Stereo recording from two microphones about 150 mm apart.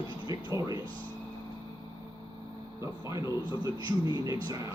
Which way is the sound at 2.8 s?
20° right (ahead or behind).